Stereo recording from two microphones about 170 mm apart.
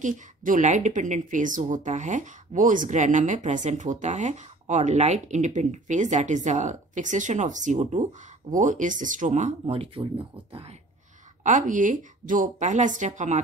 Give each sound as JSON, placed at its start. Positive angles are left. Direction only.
{"t": 0.0, "sound": "a woman's voice", "side_deg": -50}
{"t": 11.4, "sound": "a woman's voice", "side_deg": -50}